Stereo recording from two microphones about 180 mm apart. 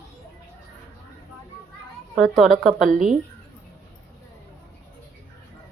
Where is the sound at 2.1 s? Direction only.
Centre (ahead or behind).